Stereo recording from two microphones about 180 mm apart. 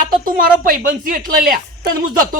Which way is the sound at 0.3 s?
50° right (ahead or behind).